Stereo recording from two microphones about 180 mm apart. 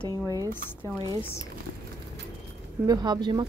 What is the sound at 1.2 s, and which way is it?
Speech, 15° left (ahead or behind).